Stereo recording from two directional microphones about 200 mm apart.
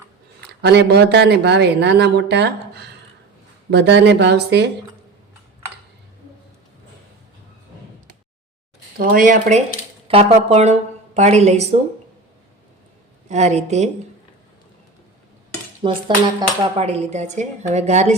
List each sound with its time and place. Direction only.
0.6 s speech: 55° right (ahead or behind)
3.7 s speech: 60° right (ahead or behind)
9.0 s speech: 45° right (ahead or behind)
10.1 s a woman's voice: 30° right (ahead or behind)
13.2 s speech: 35° right (ahead or behind)
15.8 s speech: 25° right (ahead or behind)